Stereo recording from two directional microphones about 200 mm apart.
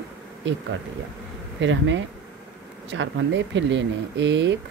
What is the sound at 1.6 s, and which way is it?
Speech, 70° right (ahead or behind).